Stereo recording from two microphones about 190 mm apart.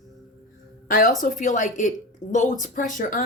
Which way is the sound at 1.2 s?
40° left (ahead or behind).